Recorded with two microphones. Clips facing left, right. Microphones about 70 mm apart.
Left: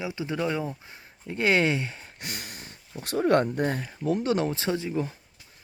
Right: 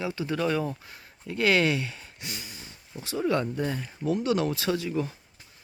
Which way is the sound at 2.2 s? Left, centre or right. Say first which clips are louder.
Left 2 dB; left.